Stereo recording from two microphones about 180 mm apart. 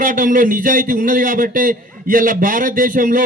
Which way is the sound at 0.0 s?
50° right (ahead or behind).